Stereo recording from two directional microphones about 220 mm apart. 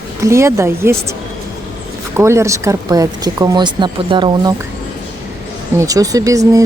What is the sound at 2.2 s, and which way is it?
Speech, 10° right (ahead or behind).